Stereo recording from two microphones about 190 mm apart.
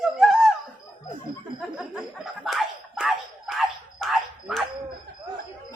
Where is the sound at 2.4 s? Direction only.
Centre (ahead or behind).